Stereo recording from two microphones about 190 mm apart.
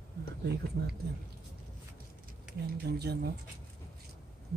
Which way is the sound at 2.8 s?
55° right (ahead or behind).